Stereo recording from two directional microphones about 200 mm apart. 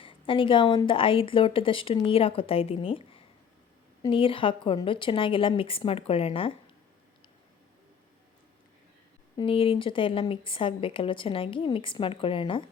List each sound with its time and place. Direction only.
0.0 s speech: 25° left (ahead or behind)
4.0 s speech: 25° left (ahead or behind)
9.4 s speech: 25° left (ahead or behind)